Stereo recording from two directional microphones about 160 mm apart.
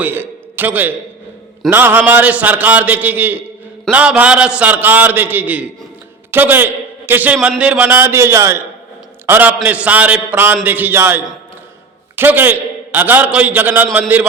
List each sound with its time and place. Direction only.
0.0 s a man's voice: 15° right (ahead or behind)